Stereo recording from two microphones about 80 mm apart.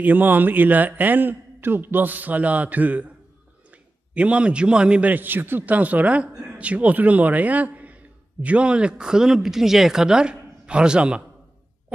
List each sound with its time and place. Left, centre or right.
0.0 s a man's voice: right
4.1 s a man's voice: centre